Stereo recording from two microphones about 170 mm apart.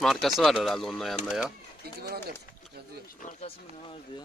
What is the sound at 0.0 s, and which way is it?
Speech, centre (ahead or behind).